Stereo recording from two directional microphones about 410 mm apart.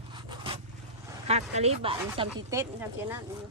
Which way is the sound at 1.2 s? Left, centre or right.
Centre.